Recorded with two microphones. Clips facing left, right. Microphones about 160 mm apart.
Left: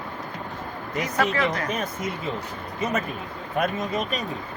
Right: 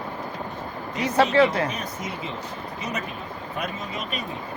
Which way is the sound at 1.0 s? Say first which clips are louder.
Right 6 dB; 30° right (ahead or behind).